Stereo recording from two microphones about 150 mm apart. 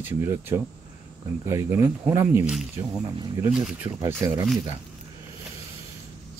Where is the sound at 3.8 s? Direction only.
20° right (ahead or behind).